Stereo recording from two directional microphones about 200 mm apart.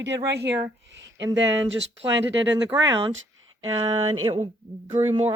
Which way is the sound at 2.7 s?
20° right (ahead or behind).